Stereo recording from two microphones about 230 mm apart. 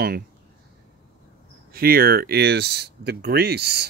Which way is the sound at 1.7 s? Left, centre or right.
Right.